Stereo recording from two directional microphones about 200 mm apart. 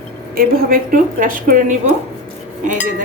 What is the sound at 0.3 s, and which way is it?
A woman's voice, 45° right (ahead or behind).